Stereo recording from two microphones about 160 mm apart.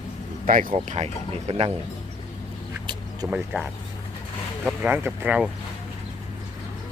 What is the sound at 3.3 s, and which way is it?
Speech, 10° right (ahead or behind).